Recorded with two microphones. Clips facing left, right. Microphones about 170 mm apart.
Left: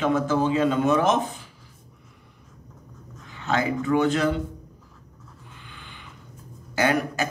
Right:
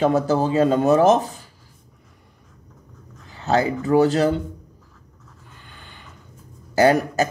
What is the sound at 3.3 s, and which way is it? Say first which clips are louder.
Speech: right 4 dB; 35° right (ahead or behind).